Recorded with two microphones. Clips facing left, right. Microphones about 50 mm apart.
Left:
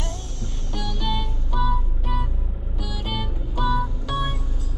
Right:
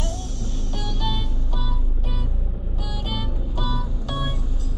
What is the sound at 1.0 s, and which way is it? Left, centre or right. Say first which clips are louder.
Music: left 1 dB; centre.